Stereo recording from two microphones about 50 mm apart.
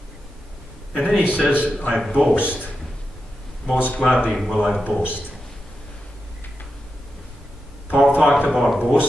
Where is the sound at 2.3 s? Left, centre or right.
Right.